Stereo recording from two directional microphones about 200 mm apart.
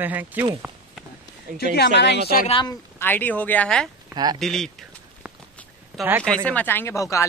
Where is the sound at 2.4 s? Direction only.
25° left (ahead or behind).